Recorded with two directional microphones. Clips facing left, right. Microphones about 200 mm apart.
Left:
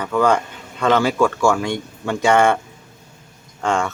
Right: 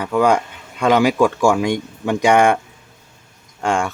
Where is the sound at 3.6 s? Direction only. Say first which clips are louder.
Right 1 dB; 10° right (ahead or behind).